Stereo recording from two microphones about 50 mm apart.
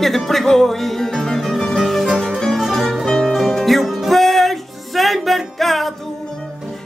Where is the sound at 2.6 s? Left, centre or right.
Centre.